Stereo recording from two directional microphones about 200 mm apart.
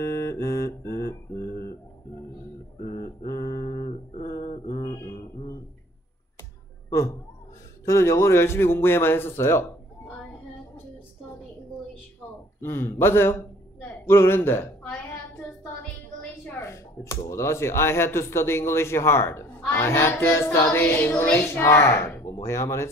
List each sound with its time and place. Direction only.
0.0 s music: 15° left (ahead or behind)
2.8 s mantra: 15° left (ahead or behind)
6.9 s a sound: 15° left (ahead or behind)
7.8 s a man's voice: 15° left (ahead or behind)
12.5 s a sound: 10° left (ahead or behind)
16.4 s speech: 15° left (ahead or behind)